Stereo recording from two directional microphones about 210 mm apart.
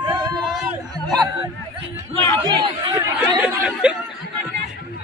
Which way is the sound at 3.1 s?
10° right (ahead or behind).